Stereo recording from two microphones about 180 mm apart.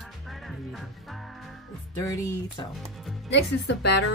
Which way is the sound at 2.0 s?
20° left (ahead or behind).